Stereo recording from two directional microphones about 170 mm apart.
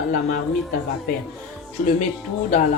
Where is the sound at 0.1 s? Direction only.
60° left (ahead or behind).